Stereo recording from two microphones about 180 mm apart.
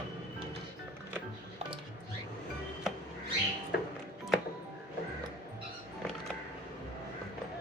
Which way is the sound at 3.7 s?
60° left (ahead or behind).